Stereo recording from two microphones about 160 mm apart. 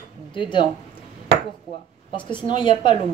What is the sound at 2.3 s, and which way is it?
Speech, 30° left (ahead or behind).